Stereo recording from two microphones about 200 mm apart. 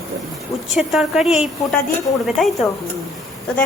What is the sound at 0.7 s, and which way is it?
Speech, centre (ahead or behind).